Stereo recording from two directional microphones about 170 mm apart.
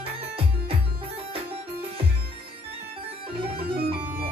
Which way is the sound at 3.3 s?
35° right (ahead or behind).